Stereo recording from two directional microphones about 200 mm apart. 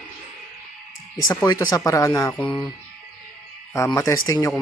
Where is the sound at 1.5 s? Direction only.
20° left (ahead or behind).